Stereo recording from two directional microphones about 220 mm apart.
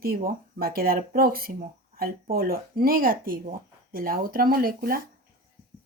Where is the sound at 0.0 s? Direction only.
40° right (ahead or behind).